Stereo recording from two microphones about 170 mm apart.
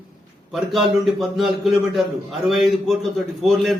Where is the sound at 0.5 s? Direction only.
Centre (ahead or behind).